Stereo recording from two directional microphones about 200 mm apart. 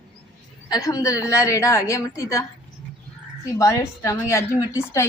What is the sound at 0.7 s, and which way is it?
A woman's voice, 15° left (ahead or behind).